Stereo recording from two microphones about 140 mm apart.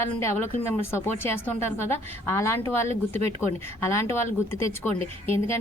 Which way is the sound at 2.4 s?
20° left (ahead or behind).